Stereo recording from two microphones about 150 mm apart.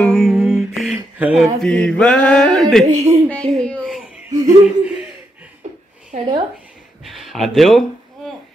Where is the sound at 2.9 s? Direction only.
45° right (ahead or behind).